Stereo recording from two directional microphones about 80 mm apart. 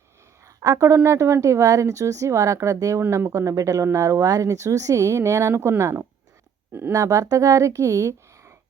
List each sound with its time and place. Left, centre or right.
0.4 s a sound: right
0.9 s speech: right
3.0 s speech: right
6.9 s a woman's voice: right